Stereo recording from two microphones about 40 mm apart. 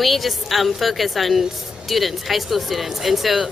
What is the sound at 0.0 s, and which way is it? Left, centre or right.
A woman's voice, centre.